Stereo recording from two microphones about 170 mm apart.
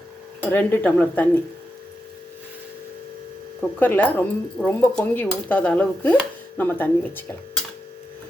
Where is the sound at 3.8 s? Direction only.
10° left (ahead or behind).